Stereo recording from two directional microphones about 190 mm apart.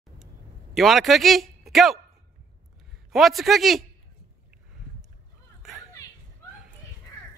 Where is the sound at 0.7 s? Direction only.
Centre (ahead or behind).